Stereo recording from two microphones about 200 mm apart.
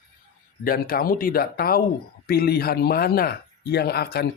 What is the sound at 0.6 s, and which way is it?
Speech, 45° left (ahead or behind).